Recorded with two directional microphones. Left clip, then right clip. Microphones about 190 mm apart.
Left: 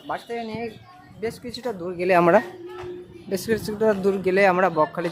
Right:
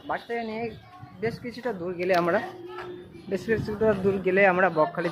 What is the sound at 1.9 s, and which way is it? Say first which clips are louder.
Speech: left 7 dB; 60° left (ahead or behind).